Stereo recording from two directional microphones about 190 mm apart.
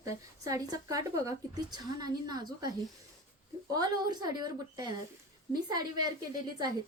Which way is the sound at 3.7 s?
20° right (ahead or behind).